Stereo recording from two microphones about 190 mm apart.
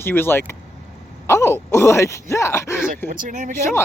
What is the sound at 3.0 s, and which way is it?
Speech, 45° right (ahead or behind).